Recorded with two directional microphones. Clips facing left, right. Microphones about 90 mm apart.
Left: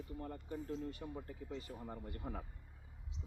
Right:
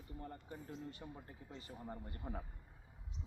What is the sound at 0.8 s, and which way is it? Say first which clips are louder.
Speech: left 5 dB; 30° right (ahead or behind).